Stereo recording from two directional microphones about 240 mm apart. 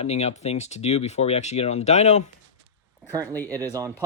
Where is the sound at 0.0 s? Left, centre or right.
Left.